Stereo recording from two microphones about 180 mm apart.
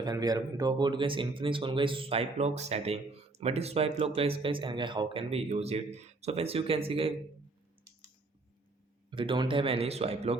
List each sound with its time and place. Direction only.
0.0 s speech: 20° right (ahead or behind)
9.0 s speech: 25° right (ahead or behind)